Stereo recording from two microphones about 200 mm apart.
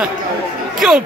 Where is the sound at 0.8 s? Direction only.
5° right (ahead or behind).